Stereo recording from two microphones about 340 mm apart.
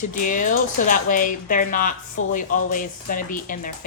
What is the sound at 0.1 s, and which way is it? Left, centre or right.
A woman's voice, left.